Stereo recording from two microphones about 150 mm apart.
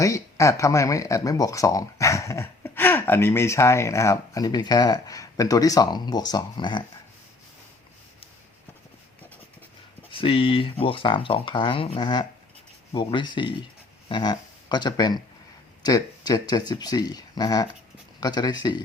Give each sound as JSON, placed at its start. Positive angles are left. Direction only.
{"t": 0.0, "sound": "speech", "side_deg": 20}
{"t": 10.1, "sound": "speech", "side_deg": 35}